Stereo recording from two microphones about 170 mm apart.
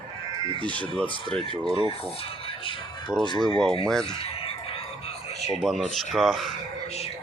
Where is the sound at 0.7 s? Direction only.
10° left (ahead or behind).